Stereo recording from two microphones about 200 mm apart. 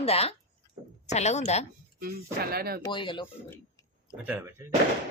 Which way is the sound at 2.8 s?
25° left (ahead or behind).